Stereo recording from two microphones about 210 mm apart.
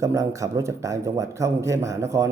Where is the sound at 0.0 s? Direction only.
15° right (ahead or behind).